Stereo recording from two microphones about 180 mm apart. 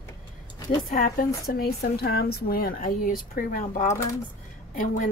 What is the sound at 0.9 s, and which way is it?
Speech, 50° left (ahead or behind).